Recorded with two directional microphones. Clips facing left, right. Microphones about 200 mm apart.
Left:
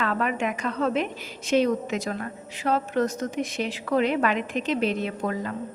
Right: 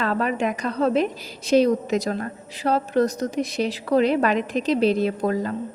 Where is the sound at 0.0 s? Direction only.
35° right (ahead or behind).